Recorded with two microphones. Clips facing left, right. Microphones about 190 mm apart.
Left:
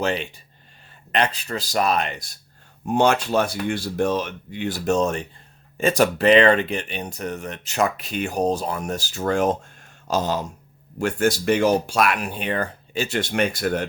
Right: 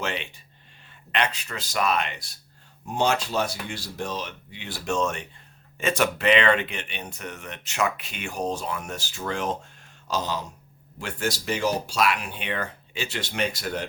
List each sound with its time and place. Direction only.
0.0 s speech: 35° left (ahead or behind)
2.8 s speech: 55° left (ahead or behind)